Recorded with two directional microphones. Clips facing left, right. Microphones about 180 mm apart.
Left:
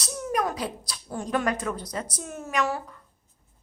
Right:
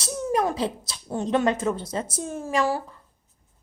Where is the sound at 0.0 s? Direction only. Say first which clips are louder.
Right 4 dB; 25° right (ahead or behind).